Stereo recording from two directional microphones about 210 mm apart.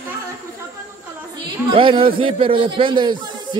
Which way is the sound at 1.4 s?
20° right (ahead or behind).